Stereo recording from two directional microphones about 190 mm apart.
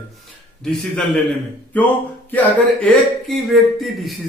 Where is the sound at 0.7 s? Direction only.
Centre (ahead or behind).